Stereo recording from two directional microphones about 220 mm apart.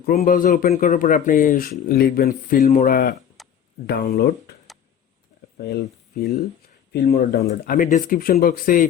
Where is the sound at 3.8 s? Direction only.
45° left (ahead or behind).